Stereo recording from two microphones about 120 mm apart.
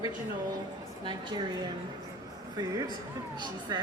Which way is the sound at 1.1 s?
35° right (ahead or behind).